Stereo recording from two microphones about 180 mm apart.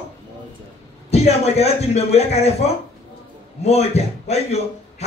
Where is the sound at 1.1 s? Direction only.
35° left (ahead or behind).